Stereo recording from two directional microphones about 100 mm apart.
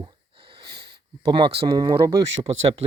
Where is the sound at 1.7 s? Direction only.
35° right (ahead or behind).